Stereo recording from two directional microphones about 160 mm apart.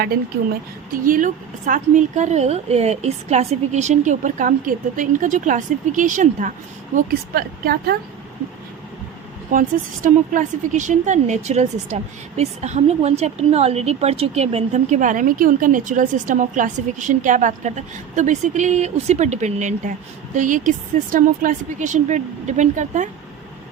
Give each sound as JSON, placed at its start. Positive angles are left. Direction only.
{"t": 1.0, "sound": "speech", "side_deg": -55}
{"t": 6.9, "sound": "speech", "side_deg": -70}
{"t": 9.5, "sound": "speech", "side_deg": -60}